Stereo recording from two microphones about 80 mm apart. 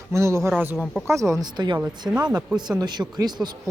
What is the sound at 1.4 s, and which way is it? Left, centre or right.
Speech, right.